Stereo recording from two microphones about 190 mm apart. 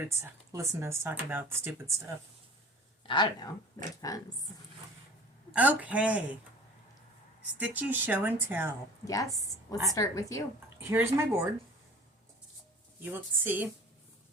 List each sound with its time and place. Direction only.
0.0 s speech: 15° right (ahead or behind)
3.1 s a woman's voice: 25° left (ahead or behind)
5.5 s speech: 5° right (ahead or behind)
7.6 s speech: 10° right (ahead or behind)
9.0 s a woman's voice: 20° left (ahead or behind)
10.8 s speech: 10° right (ahead or behind)
13.0 s speech: 10° right (ahead or behind)